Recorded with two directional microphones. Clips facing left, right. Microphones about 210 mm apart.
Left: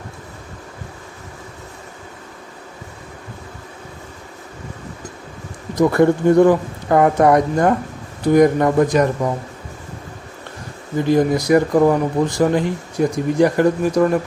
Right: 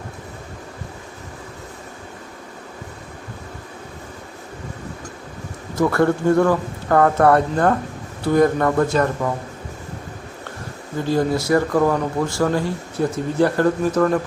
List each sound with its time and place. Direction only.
5.7 s speech: 15° left (ahead or behind)
11.0 s speech: 15° left (ahead or behind)